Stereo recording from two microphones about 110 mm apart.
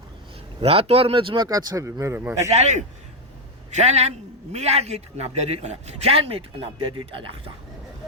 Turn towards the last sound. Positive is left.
turn(degrees=-50)  # may be behind; listen again after turning